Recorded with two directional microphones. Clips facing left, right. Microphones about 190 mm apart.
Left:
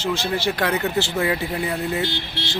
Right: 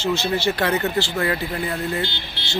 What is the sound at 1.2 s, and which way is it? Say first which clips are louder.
Speech: left 1 dB; 15° left (ahead or behind).